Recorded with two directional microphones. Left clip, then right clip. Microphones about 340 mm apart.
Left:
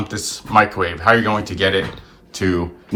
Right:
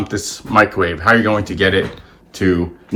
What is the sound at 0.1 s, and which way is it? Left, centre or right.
Speech, centre.